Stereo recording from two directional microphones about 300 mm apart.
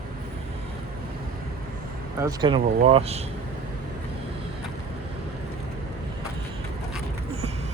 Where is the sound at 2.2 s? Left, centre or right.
Centre.